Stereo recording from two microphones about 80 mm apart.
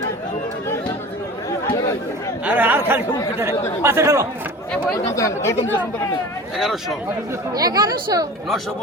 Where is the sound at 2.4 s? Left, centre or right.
Centre; by 4.3 s right.